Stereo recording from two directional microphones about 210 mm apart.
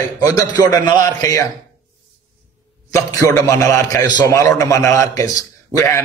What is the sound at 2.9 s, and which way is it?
A man's voice, 15° left (ahead or behind).